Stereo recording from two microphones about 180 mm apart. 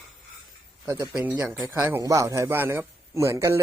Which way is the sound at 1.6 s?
10° right (ahead or behind).